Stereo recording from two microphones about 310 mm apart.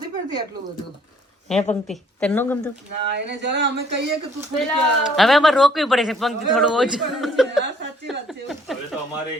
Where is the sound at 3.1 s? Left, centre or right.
Right.